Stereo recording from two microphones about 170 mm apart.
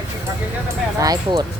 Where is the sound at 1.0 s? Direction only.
25° right (ahead or behind).